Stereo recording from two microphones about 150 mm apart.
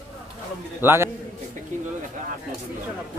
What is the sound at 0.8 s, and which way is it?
Speech, 15° right (ahead or behind).